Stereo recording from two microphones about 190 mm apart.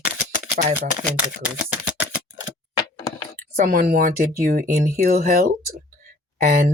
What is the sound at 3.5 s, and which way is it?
Speech, 50° right (ahead or behind).